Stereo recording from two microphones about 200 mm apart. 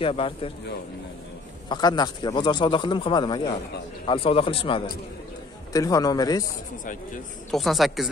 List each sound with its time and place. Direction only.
0.0 s speech: 30° left (ahead or behind)
1.7 s speech: 20° left (ahead or behind)
7.5 s speech: centre (ahead or behind)